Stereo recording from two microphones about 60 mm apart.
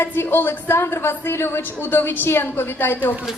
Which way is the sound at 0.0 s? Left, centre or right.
Left.